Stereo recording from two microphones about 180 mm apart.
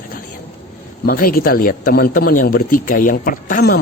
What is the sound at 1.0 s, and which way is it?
Speech, 55° left (ahead or behind).